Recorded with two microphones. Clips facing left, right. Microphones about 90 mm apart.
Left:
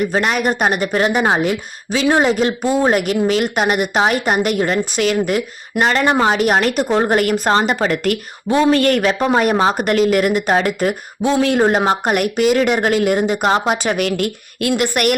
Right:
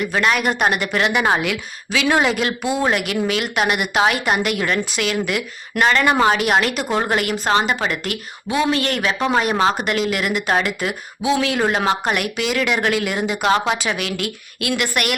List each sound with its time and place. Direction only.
0.0 s a woman's voice: 40° left (ahead or behind)